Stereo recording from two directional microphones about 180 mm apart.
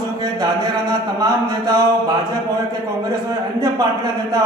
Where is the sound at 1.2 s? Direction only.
20° right (ahead or behind).